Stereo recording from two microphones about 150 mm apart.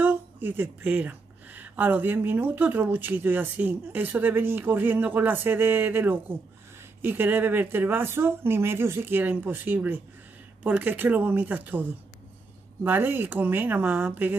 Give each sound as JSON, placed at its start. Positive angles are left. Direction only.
{"t": 0.0, "sound": "speech", "side_deg": -15}